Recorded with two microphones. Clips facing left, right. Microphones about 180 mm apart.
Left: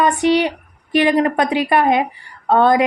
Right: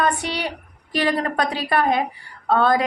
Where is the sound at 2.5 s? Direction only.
20° left (ahead or behind).